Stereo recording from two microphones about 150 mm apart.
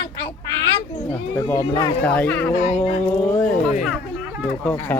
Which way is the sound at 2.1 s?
10° left (ahead or behind).